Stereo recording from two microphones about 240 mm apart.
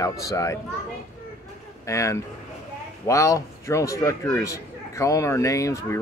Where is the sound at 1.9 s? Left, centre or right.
Centre.